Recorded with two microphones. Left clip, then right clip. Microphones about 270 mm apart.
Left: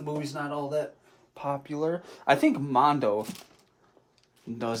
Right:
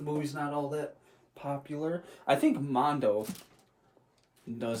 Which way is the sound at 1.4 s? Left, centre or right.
Left.